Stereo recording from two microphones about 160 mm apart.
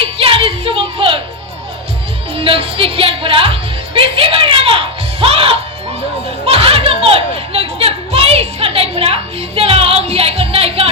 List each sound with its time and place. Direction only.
0.0 s a sound: 35° right (ahead or behind)
2.3 s music: 35° right (ahead or behind)
6.4 s children playing: 40° right (ahead or behind)